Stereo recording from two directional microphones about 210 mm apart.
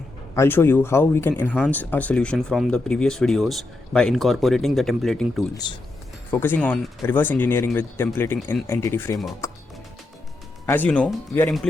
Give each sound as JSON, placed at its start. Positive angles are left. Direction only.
{"t": 0.3, "sound": "speech", "side_deg": 10}
{"t": 9.4, "sound": "music", "side_deg": 15}
{"t": 10.7, "sound": "speech", "side_deg": 5}